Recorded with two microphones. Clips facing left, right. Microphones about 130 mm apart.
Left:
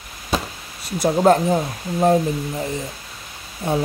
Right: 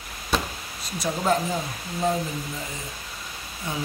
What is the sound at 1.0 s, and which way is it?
Speech, 60° left (ahead or behind).